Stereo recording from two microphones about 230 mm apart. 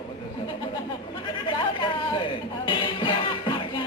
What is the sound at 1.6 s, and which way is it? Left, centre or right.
Music, left.